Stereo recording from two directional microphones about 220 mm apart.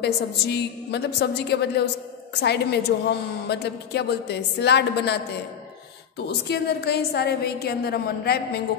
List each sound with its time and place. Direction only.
0.0 s a man's voice: 50° left (ahead or behind)